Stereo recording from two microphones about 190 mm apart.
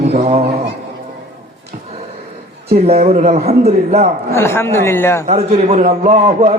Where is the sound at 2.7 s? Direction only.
35° right (ahead or behind).